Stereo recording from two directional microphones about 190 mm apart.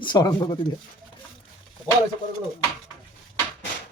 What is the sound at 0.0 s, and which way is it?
Speech, 25° left (ahead or behind).